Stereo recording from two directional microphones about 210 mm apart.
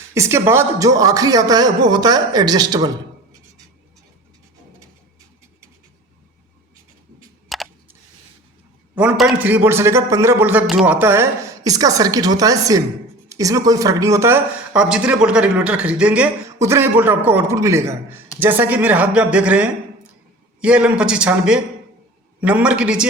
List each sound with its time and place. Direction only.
0.1 s speech: 15° right (ahead or behind)
7.5 s a sound: centre (ahead or behind)
9.0 s a man's voice: 5° right (ahead or behind)